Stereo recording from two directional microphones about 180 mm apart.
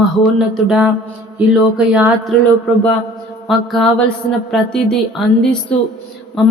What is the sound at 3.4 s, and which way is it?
Speech, centre (ahead or behind).